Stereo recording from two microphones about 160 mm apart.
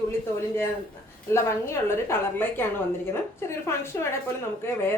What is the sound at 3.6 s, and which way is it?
Speech, 15° left (ahead or behind).